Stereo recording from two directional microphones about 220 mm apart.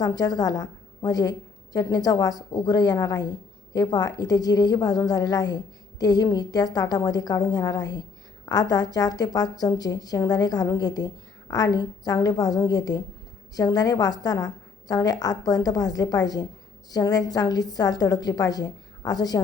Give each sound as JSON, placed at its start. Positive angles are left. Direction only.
{"t": 0.0, "sound": "a woman's voice", "side_deg": 15}